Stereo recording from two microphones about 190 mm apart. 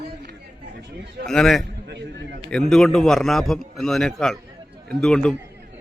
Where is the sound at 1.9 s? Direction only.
65° right (ahead or behind).